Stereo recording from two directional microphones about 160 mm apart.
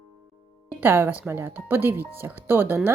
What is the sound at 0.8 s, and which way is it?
A woman's voice, 15° right (ahead or behind).